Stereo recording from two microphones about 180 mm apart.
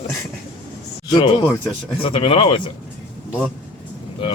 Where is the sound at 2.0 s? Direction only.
30° left (ahead or behind).